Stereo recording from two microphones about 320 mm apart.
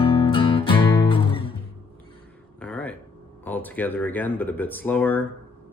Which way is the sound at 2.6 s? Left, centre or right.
Centre.